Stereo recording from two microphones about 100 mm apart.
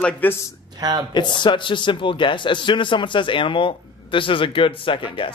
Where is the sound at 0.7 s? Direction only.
45° right (ahead or behind).